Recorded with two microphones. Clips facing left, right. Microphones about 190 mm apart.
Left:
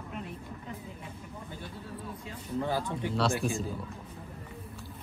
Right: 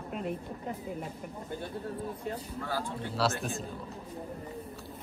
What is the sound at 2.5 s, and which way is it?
Speech, 20° left (ahead or behind).